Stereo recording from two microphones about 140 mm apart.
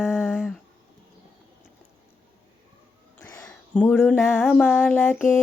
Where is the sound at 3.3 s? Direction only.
25° left (ahead or behind).